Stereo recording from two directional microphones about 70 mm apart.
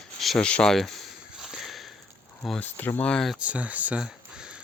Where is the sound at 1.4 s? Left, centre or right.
Centre.